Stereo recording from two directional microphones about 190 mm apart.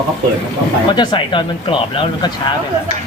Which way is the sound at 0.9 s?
25° left (ahead or behind).